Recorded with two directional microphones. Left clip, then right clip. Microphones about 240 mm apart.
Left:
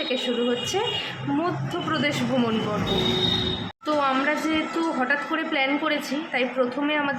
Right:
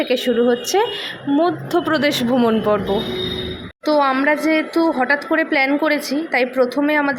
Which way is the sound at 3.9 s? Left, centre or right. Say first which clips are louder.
Right 7 dB; right.